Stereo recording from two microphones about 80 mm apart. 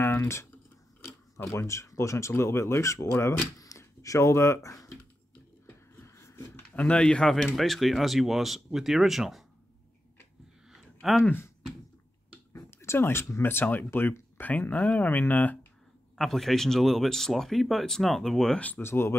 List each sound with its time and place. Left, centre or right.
0.0 s a sound: left
1.5 s speech: left
6.0 s a sound: left
6.7 s speech: centre
11.0 s speech: centre
11.2 s speech: left
12.5 s speech: left
16.2 s speech: centre
18.8 s speech: left